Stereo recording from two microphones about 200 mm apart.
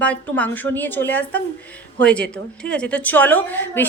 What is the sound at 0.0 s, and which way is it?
A woman's voice, 5° left (ahead or behind).